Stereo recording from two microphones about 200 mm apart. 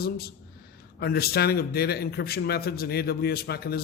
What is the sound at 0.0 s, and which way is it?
A man's voice, 50° left (ahead or behind).